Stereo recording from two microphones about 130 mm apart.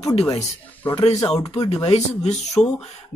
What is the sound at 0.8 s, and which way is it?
Speech, 50° left (ahead or behind).